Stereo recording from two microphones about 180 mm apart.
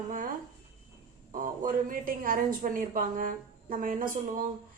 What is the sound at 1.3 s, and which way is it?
A woman's voice, 50° right (ahead or behind).